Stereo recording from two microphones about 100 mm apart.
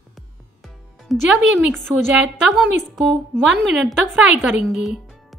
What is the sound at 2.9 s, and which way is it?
A woman's voice, 5° left (ahead or behind).